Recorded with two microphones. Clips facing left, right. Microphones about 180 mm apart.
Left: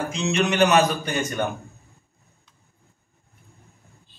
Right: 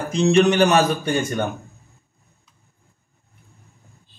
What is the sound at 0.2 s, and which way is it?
Speech, 35° right (ahead or behind).